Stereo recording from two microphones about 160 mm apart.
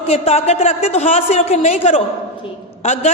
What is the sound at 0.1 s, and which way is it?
A woman's voice, 40° left (ahead or behind).